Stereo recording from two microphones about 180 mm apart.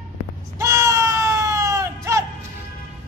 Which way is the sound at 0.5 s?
15° right (ahead or behind).